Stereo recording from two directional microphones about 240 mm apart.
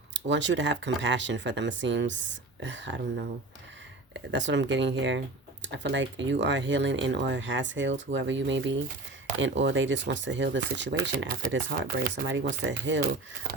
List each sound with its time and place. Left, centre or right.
0.1 s speech: right
11.4 s speech: right
12.3 s speech: right